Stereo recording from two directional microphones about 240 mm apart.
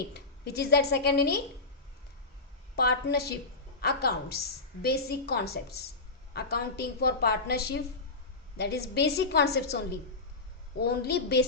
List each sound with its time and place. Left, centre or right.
0.1 s a woman's voice: left
2.7 s a woman's voice: left